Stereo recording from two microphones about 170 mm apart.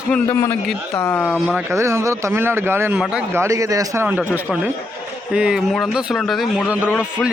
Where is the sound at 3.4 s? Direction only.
20° right (ahead or behind).